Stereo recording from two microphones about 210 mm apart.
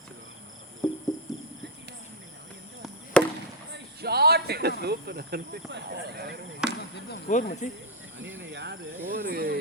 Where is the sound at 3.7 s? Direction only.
50° right (ahead or behind).